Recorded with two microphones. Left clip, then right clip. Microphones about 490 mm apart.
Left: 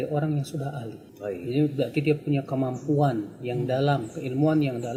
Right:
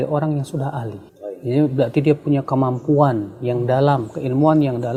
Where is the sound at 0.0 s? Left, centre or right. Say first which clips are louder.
Right 7 dB; right.